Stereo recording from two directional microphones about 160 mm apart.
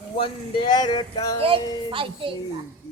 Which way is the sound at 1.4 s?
35° right (ahead or behind).